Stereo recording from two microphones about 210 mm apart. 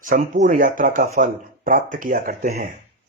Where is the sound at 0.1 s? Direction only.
40° right (ahead or behind).